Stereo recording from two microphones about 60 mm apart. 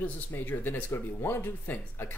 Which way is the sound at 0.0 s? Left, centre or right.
Left.